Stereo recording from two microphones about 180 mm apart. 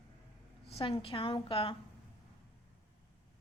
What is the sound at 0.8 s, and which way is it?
Speech, 30° left (ahead or behind).